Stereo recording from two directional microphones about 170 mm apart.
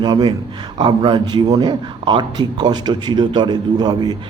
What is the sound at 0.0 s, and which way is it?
A man's voice, 25° right (ahead or behind).